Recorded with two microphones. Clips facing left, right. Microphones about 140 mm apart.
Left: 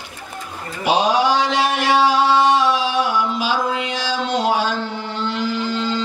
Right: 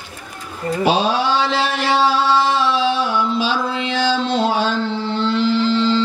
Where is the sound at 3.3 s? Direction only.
30° right (ahead or behind).